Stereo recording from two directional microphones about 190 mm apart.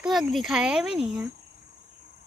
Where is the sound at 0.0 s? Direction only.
Centre (ahead or behind).